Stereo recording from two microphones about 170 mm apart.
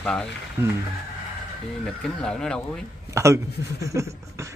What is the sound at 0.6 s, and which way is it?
Speech, 15° right (ahead or behind).